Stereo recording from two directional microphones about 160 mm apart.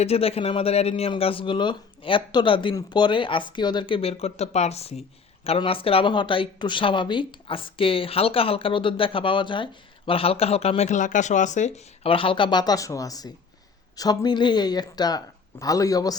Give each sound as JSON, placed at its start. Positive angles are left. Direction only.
{"t": 0.0, "sound": "speech", "side_deg": 40}
{"t": 12.0, "sound": "speech", "side_deg": 35}